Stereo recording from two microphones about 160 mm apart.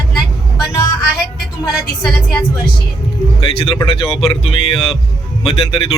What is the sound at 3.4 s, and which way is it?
Speech, 35° left (ahead or behind).